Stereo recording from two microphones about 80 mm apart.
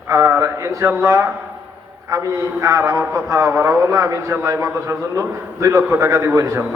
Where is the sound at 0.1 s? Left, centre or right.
Right.